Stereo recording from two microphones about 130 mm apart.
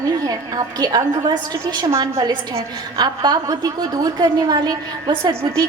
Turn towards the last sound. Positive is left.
turn(degrees=-20)  # may be behind; listen again after turning